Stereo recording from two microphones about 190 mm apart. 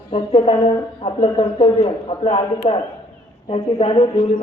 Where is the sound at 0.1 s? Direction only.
30° left (ahead or behind).